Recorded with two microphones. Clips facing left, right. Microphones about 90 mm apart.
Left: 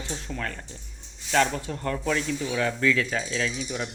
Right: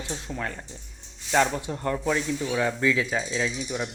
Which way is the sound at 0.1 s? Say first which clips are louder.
Right 1 dB; 15° right (ahead or behind).